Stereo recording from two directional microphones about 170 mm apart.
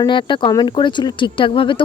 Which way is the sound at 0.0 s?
25° left (ahead or behind).